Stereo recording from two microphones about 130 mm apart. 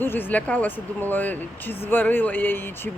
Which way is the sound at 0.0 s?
15° left (ahead or behind).